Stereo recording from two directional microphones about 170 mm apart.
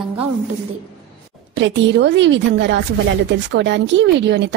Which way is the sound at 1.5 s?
90° right.